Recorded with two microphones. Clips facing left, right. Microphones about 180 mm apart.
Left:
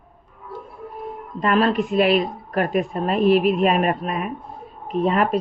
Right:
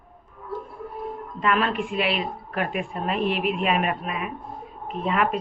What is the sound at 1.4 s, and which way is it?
Speech, 40° left (ahead or behind).